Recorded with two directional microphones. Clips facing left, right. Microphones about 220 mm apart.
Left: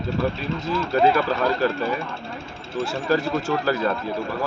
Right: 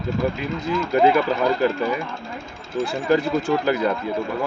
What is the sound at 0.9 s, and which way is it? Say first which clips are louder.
Speech: right 2 dB; 15° right (ahead or behind).